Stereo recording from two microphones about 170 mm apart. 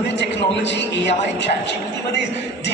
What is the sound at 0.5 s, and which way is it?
A man's voice, 90° left.